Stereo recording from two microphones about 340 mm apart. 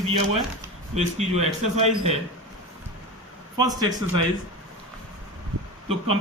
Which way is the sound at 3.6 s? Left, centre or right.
Centre.